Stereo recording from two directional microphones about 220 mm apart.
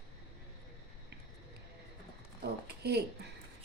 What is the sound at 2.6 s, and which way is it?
Speech, 45° right (ahead or behind).